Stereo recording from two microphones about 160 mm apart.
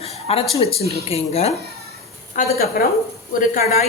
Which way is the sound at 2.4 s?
55° left (ahead or behind).